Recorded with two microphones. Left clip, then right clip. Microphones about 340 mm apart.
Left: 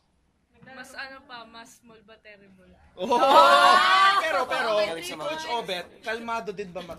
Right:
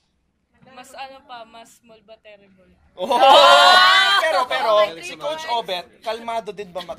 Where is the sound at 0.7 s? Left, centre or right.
Centre.